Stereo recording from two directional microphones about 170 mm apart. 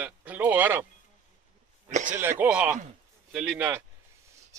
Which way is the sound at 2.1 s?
10° right (ahead or behind).